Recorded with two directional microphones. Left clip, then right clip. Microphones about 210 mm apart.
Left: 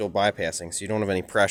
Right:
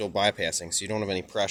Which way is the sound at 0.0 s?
15° left (ahead or behind).